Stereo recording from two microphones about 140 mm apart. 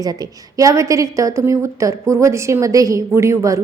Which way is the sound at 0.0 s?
25° right (ahead or behind).